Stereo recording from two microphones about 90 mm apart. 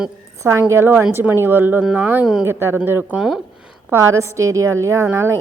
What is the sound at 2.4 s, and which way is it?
Speech, 30° right (ahead or behind).